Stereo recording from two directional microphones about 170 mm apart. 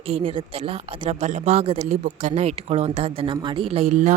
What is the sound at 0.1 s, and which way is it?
Speech, 35° right (ahead or behind).